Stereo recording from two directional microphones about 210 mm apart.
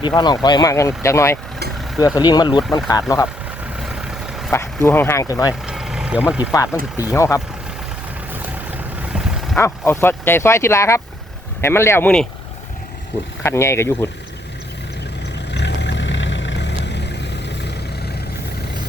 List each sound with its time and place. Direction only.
0.2 s speech: 20° left (ahead or behind)
3.6 s vehicle: 5° right (ahead or behind)
4.5 s speech: 10° left (ahead or behind)
5.6 s vehicle: 5° right (ahead or behind)
6.7 s speech: 15° left (ahead or behind)
8.3 s boat: 10° right (ahead or behind)
9.6 s speech: 10° left (ahead or behind)
13.4 s speech: 10° left (ahead or behind)
15.5 s vehicle: 55° left (ahead or behind)